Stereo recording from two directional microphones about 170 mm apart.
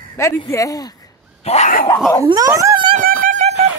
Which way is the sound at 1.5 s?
40° left (ahead or behind).